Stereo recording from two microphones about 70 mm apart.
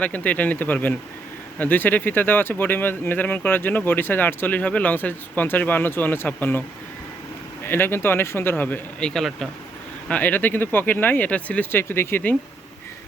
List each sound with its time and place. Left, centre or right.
0.0 s speech: centre
7.6 s a man's voice: left
9.0 s speech: centre
10.1 s speech: left